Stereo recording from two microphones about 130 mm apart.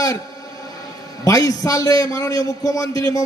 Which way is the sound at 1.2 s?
25° left (ahead or behind).